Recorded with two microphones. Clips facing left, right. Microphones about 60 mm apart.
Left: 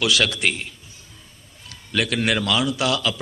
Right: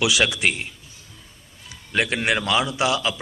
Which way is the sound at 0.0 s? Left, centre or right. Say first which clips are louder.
Even; centre.